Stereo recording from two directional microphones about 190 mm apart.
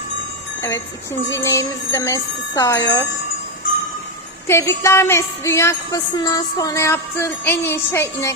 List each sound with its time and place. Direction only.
1.3 s music: 15° left (ahead or behind)
4.4 s jingle bell: 15° left (ahead or behind)
4.8 s music: 15° left (ahead or behind)